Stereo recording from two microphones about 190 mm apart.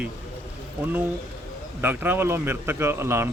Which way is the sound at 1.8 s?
10° right (ahead or behind).